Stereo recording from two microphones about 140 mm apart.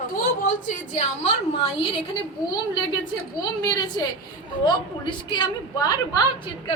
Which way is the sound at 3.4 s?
25° left (ahead or behind).